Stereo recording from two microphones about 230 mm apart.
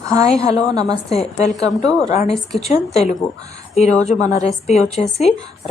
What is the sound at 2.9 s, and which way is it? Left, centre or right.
Speech, left.